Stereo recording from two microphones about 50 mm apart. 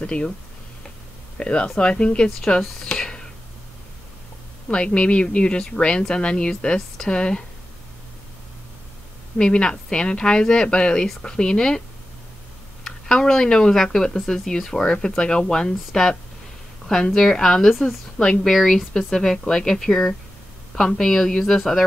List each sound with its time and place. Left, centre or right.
0.0 s speech: left
1.4 s speech: left
2.4 s speech: centre
4.6 s speech: left
9.4 s speech: centre
12.8 s a woman's voice: centre
18.4 s a woman's voice: centre